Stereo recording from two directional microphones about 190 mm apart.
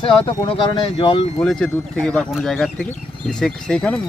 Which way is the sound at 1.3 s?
5° left (ahead or behind).